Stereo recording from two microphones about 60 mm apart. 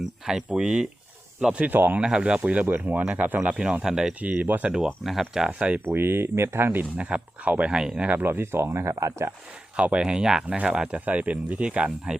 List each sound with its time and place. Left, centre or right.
0.0 s speech: centre
1.7 s speech: right
2.0 s speech: centre
4.2 s speech: right
5.3 s speech: centre
5.8 s speech: right
6.9 s speech: right
8.1 s speech: right
9.7 s speech: centre